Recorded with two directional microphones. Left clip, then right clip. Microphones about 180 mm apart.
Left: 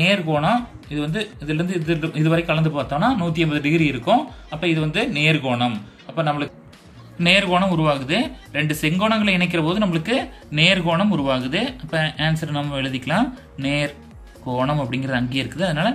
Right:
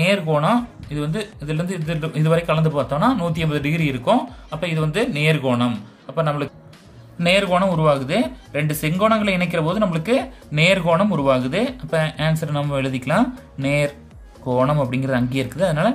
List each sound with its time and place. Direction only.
0.0 s speech: 50° right (ahead or behind)